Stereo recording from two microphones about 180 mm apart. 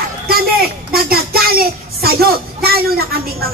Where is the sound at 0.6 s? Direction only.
60° right (ahead or behind).